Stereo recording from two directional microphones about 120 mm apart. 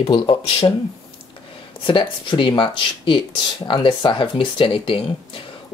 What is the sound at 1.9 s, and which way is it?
Speech, 45° left (ahead or behind).